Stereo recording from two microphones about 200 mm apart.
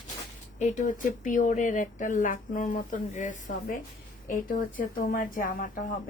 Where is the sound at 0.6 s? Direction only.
40° left (ahead or behind).